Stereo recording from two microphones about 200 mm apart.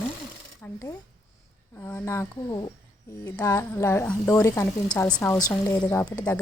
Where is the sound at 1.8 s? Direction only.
15° left (ahead or behind).